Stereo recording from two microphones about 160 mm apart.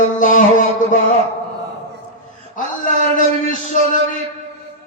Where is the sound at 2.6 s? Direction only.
55° left (ahead or behind).